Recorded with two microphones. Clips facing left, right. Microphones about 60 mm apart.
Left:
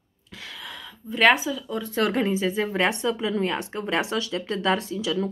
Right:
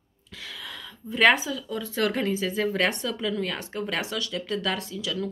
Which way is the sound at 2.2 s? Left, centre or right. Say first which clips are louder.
Left 2 dB; left.